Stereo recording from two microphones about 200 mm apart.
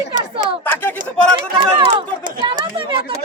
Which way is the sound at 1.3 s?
25° right (ahead or behind).